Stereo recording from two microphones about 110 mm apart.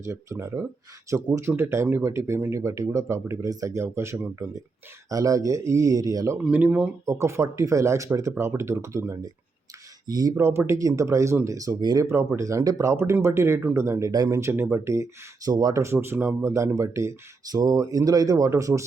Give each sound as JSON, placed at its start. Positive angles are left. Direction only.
{"t": 0.0, "sound": "speech", "side_deg": -25}
{"t": 6.4, "sound": "speech", "side_deg": -15}
{"t": 7.0, "sound": "speech", "side_deg": -30}
{"t": 10.3, "sound": "speech", "side_deg": -20}
{"t": 12.0, "sound": "speech", "side_deg": -25}
{"t": 15.4, "sound": "speech", "side_deg": -35}